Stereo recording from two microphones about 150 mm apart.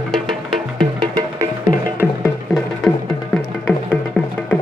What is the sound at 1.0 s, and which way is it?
Music, 25° right (ahead or behind).